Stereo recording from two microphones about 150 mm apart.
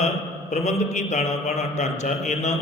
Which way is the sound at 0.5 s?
50° left (ahead or behind).